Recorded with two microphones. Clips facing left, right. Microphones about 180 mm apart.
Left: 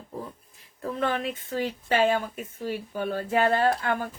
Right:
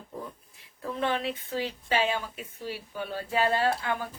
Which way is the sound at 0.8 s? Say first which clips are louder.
Left 2 dB; 45° left (ahead or behind).